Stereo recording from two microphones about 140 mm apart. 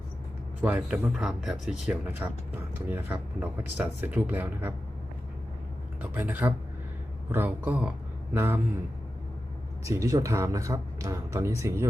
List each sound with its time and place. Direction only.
0.6 s speech: 10° right (ahead or behind)
6.0 s speech: 10° right (ahead or behind)
9.8 s speech: 25° right (ahead or behind)